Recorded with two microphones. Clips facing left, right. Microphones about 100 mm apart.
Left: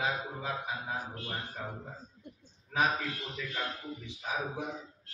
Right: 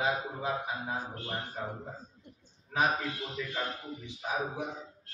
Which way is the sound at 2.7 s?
30° right (ahead or behind).